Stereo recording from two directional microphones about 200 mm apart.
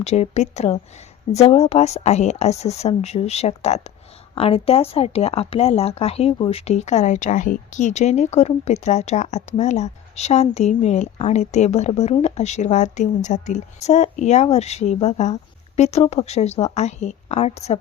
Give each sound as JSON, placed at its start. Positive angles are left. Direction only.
{"t": 0.0, "sound": "speech", "side_deg": 35}